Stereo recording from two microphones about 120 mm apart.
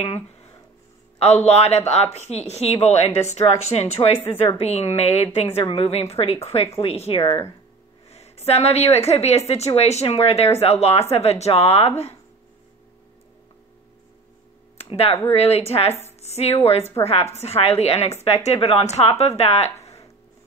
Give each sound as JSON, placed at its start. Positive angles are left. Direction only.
{"t": 1.2, "sound": "a woman's voice", "side_deg": 65}
{"t": 4.2, "sound": "a woman's voice", "side_deg": 20}
{"t": 4.6, "sound": "a woman's voice", "side_deg": 60}
{"t": 14.8, "sound": "a woman's voice", "side_deg": 55}